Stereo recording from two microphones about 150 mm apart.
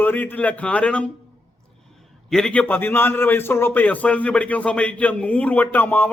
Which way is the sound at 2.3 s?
5° left (ahead or behind).